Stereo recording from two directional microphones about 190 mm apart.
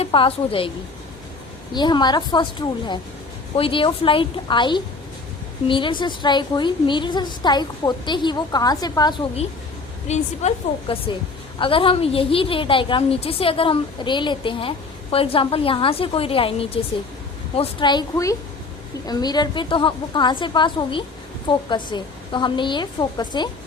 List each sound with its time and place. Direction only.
0.0 s a woman's voice: 30° left (ahead or behind)
1.7 s a woman's voice: 20° left (ahead or behind)